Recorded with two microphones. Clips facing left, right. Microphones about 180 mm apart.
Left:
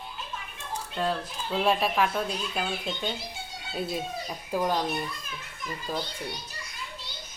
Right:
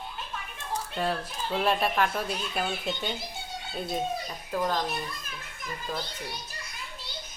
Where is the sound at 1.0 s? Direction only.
10° right (ahead or behind).